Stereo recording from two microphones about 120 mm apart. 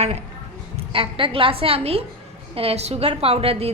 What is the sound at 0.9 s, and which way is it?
A woman's voice, 45° right (ahead or behind).